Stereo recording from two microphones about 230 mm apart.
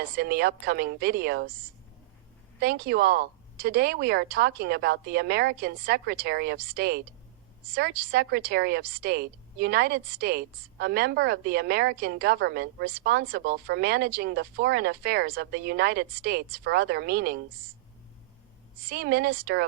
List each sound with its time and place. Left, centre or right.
0.2 s a woman's voice: right
2.6 s a woman's voice: right
18.9 s a woman's voice: right